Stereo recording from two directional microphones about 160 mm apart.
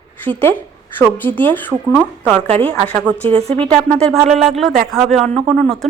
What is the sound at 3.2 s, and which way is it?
Speech, 35° right (ahead or behind).